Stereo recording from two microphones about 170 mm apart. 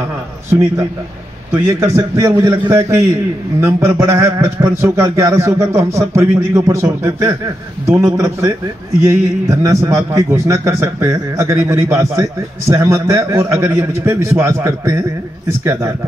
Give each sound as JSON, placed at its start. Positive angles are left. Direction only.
{"t": 1.5, "sound": "a man's voice", "side_deg": -15}